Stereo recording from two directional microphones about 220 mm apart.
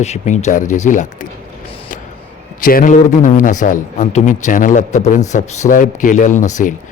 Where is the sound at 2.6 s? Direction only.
40° left (ahead or behind).